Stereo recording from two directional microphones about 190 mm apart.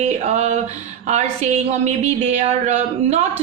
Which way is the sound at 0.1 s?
35° right (ahead or behind).